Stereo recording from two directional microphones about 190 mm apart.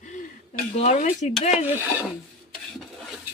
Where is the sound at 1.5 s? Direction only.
10° right (ahead or behind).